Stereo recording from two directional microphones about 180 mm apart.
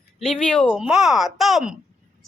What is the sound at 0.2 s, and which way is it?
Speech, 5° left (ahead or behind).